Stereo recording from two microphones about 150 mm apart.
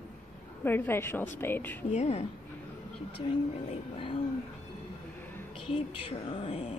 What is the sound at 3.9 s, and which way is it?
Speech, 35° left (ahead or behind).